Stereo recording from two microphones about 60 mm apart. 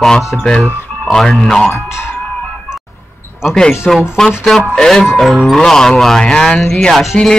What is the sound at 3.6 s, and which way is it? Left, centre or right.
Speech, centre.